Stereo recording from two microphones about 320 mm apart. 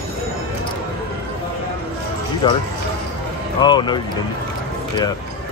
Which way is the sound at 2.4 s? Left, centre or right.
Centre.